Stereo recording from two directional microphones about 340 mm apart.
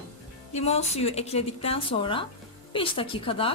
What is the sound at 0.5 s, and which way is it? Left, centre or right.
Speech, centre.